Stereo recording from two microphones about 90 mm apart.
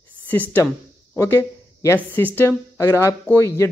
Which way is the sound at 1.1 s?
35° left (ahead or behind).